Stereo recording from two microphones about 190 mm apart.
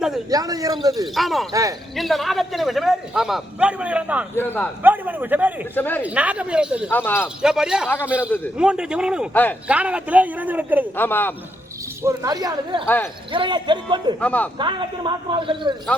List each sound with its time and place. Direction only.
0.3 s a woman's voice: 20° right (ahead or behind)
1.0 s a man's voice: centre (ahead or behind)
4.4 s speech: 10° left (ahead or behind)
4.8 s a man's voice: 10° right (ahead or behind)
5.7 s speech: 10° left (ahead or behind)
6.0 s a man's voice: 5° right (ahead or behind)
6.9 s speech: 10° left (ahead or behind)
7.4 s a man's voice: 5° right (ahead or behind)
9.3 s speech: 10° left (ahead or behind)
9.6 s a man's voice: 5° right (ahead or behind)
10.9 s speech: 10° left (ahead or behind)
12.0 s a woman's voice: 20° right (ahead or behind)
14.2 s speech: 10° left (ahead or behind)
14.6 s a woman's voice: 25° right (ahead or behind)